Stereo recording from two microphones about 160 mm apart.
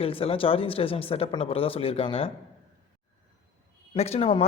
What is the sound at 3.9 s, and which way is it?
Speech, 40° left (ahead or behind).